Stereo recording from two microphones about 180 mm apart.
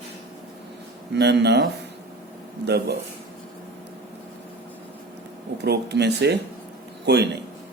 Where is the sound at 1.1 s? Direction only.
70° right (ahead or behind).